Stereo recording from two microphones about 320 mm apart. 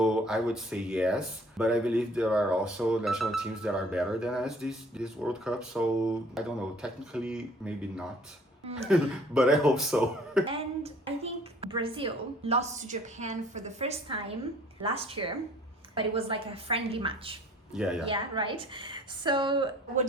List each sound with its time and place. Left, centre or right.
0.0 s speech: centre
10.5 s a sound: centre
11.7 s a woman's voice: centre
17.7 s speech: centre
18.0 s a woman's voice: centre